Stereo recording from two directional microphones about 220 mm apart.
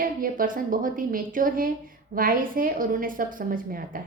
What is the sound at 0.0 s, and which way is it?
A woman's voice, 40° right (ahead or behind).